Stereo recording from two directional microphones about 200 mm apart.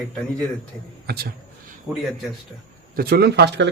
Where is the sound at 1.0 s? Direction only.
50° right (ahead or behind).